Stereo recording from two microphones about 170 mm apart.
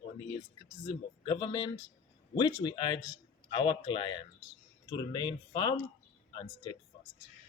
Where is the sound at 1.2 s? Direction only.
25° left (ahead or behind).